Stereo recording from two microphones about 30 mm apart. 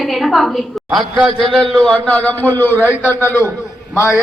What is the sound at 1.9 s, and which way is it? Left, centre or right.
Speech, left.